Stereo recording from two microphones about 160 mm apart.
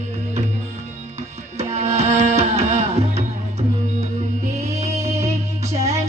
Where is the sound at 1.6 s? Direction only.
45° right (ahead or behind).